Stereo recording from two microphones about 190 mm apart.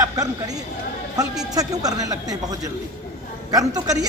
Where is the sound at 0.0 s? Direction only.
20° right (ahead or behind).